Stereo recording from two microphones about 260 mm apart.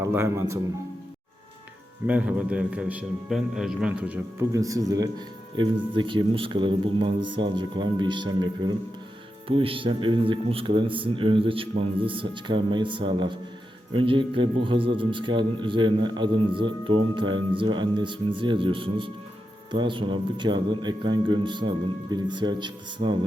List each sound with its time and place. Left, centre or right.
0.0 s speech: centre
2.0 s a man's voice: centre